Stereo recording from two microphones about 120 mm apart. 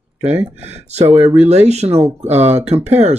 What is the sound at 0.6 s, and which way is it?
Speech, 65° right (ahead or behind).